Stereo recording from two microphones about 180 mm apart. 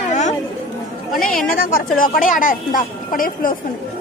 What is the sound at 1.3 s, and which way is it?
Speech, 50° left (ahead or behind).